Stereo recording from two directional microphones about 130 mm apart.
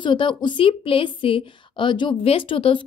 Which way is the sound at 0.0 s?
40° left (ahead or behind).